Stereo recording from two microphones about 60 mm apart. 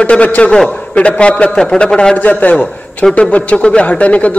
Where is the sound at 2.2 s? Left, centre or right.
Left.